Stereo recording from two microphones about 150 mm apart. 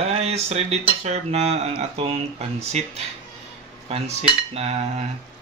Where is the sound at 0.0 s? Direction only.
45° right (ahead or behind).